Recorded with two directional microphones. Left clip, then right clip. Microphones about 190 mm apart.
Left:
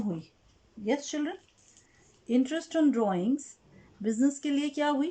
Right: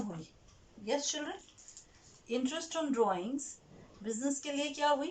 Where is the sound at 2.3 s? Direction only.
45° left (ahead or behind).